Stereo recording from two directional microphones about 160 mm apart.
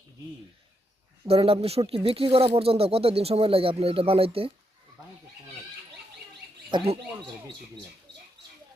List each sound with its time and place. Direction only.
1.3 s speech: 35° right (ahead or behind)
6.7 s speech: 30° right (ahead or behind)